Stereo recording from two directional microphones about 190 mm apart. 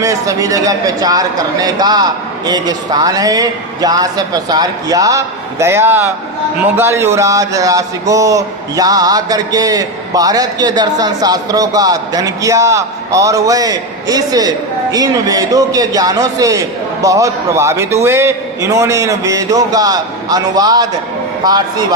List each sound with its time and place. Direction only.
0.0 s speech: 15° right (ahead or behind)